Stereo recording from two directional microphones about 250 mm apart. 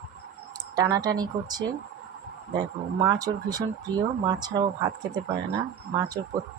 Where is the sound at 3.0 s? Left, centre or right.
Centre.